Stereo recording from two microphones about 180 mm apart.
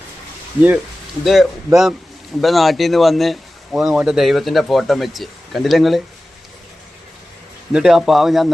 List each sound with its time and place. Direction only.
1.2 s speech: centre (ahead or behind)
7.7 s speech: 5° right (ahead or behind)